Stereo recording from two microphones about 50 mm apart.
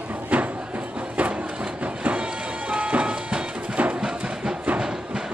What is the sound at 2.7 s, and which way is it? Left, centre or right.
Music, right.